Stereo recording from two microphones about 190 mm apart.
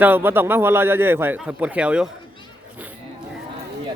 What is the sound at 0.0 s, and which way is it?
A man's voice, 10° right (ahead or behind).